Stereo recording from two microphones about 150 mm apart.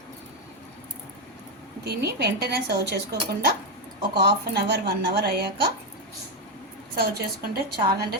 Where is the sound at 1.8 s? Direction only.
90° right.